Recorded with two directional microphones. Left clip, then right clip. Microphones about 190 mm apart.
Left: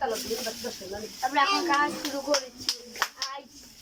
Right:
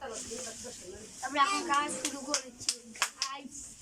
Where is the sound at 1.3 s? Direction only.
5° right (ahead or behind).